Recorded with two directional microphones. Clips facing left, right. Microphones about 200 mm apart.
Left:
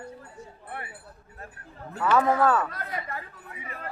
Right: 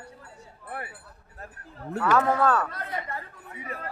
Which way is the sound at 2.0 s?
5° left (ahead or behind).